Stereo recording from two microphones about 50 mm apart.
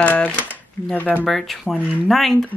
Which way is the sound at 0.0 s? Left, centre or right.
Left.